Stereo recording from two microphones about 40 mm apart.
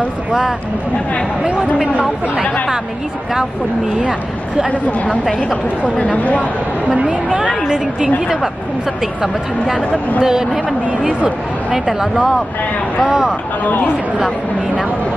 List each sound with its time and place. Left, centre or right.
0.3 s speech: centre
1.4 s speech: right
4.6 s speech: left
6.9 s speech: right
7.6 s speech: centre
11.7 s speech: centre
13.7 s speech: left